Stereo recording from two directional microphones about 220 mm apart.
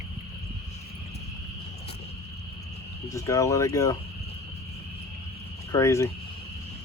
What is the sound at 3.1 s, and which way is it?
Speech, 15° left (ahead or behind).